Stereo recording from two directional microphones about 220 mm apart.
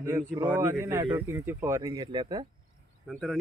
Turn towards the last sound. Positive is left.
turn(degrees=0)  # may be behind; listen again after turning